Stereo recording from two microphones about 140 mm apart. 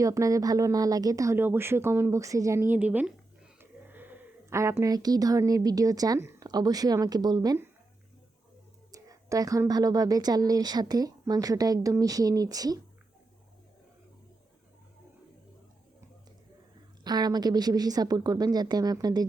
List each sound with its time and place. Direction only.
0.0 s speech: 25° right (ahead or behind)
8.9 s speech: 25° right (ahead or behind)
17.0 s speech: 30° right (ahead or behind)